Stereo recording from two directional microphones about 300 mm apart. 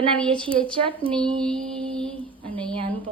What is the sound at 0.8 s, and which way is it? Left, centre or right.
Speech, centre.